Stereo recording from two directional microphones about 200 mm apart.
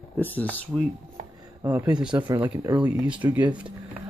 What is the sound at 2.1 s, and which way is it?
Speech, 20° right (ahead or behind).